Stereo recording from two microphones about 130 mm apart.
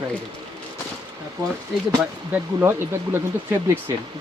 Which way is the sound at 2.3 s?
20° right (ahead or behind).